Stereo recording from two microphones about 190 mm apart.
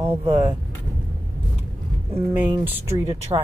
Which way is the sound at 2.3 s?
10° right (ahead or behind).